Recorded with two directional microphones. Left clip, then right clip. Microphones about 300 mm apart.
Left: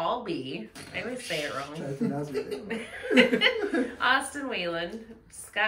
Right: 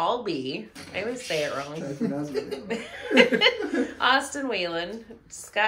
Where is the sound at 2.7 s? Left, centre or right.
Centre.